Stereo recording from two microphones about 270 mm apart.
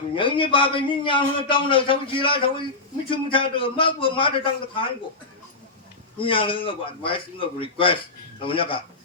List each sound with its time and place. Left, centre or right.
0.2 s a man's voice: centre
6.1 s a man's voice: centre